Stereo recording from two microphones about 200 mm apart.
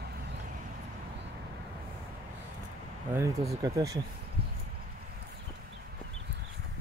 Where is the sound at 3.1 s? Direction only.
15° right (ahead or behind).